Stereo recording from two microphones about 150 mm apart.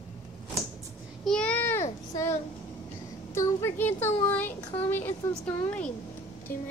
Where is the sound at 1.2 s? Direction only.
5° left (ahead or behind).